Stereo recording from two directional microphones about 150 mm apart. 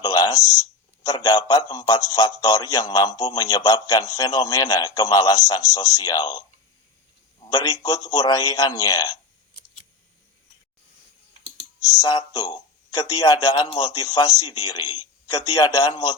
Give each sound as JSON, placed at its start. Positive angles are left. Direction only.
{"t": 0.0, "sound": "a sound", "side_deg": 25}
{"t": 1.0, "sound": "a man's voice", "side_deg": 25}
{"t": 7.5, "sound": "a man's voice", "side_deg": 25}
{"t": 11.9, "sound": "a man's voice", "side_deg": 25}